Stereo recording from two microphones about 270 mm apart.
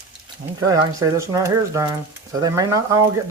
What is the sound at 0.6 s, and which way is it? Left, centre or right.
Speech, centre.